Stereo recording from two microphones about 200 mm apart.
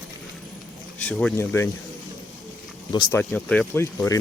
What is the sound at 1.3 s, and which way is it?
Speech, 15° left (ahead or behind).